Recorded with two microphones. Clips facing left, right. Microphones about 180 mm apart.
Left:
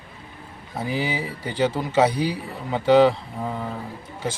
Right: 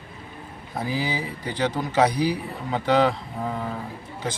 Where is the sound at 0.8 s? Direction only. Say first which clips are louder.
Left 1 dB; 25° left (ahead or behind).